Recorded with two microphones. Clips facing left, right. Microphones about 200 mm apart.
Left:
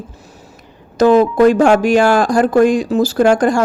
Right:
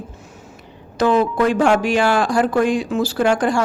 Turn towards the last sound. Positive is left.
turn(degrees=45)  # may be behind; listen again after turning